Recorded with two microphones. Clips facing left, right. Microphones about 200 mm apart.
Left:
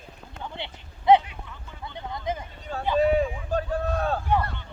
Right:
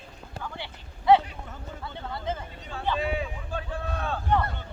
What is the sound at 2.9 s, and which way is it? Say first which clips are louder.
Boat: left 13 dB; 40° left (ahead or behind).